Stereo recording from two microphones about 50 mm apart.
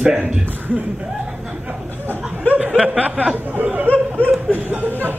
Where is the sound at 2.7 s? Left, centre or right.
Centre.